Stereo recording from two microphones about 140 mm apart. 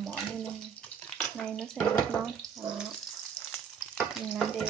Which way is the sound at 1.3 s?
5° left (ahead or behind).